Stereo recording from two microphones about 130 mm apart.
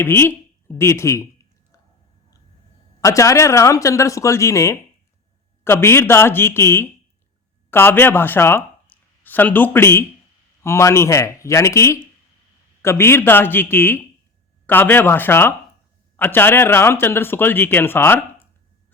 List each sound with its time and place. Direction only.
0.0 s speech: 15° left (ahead or behind)
3.0 s speech: 25° left (ahead or behind)